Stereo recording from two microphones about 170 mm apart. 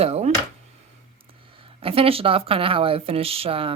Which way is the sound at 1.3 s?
30° right (ahead or behind).